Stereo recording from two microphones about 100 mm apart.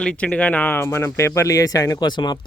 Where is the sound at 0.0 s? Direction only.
10° left (ahead or behind).